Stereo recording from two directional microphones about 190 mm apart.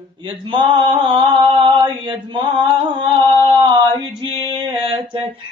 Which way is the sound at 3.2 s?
20° right (ahead or behind).